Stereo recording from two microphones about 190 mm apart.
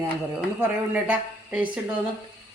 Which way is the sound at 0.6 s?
10° right (ahead or behind).